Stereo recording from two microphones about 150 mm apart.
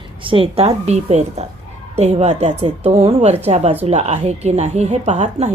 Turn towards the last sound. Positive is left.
turn(degrees=-50)  # may be behind; listen again after turning